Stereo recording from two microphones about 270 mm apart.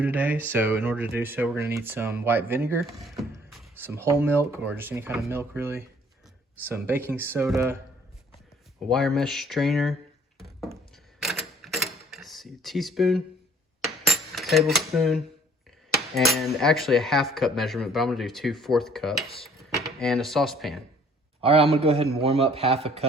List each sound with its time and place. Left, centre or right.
0.0 s speech: centre
8.9 s cutlery: centre
10.9 s camera: centre
14.1 s coin: centre
16.1 s cutlery: centre
21.4 s speech: right